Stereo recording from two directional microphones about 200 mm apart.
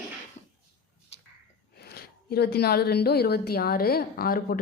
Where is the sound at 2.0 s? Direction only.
50° left (ahead or behind).